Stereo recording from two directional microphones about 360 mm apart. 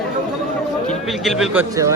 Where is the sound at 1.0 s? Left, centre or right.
Centre.